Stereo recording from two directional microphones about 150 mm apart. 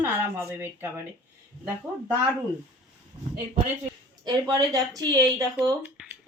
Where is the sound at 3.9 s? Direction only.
30° right (ahead or behind).